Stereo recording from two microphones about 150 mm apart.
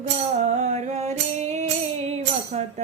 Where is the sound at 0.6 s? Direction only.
50° right (ahead or behind).